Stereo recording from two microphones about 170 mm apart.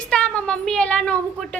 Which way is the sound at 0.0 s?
5° left (ahead or behind).